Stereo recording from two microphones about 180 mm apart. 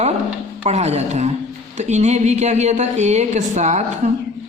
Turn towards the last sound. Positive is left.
turn(degrees=-45)  # may be behind; listen again after turning